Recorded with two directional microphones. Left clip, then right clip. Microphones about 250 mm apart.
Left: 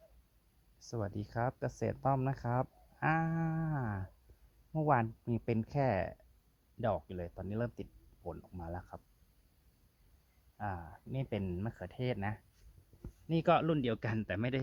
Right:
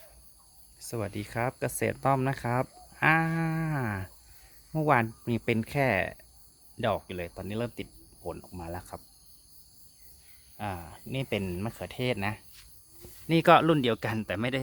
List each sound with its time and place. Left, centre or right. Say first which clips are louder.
0.9 s speech: right 6 dB; centre
10.6 s speech: right 5 dB; centre